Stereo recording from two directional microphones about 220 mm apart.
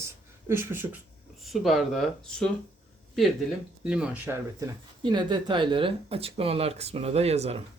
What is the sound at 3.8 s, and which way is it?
Speech, 5° right (ahead or behind).